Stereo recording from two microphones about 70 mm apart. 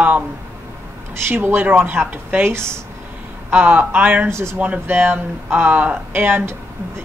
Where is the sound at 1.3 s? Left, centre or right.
Right.